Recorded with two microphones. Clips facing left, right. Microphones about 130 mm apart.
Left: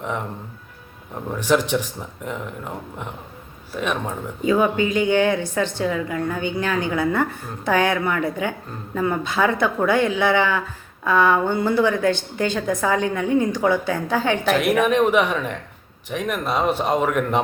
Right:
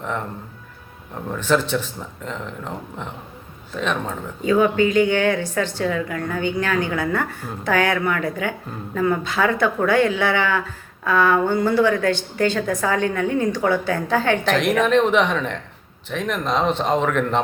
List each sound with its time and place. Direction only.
0.0 s a woman's voice: 15° left (ahead or behind)
1.3 s a woman's voice: 15° left (ahead or behind)